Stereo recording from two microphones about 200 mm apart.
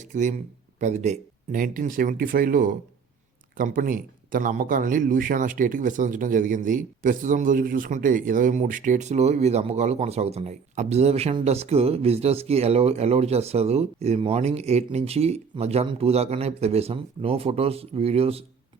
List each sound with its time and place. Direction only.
0.0 s a man's voice: 40° right (ahead or behind)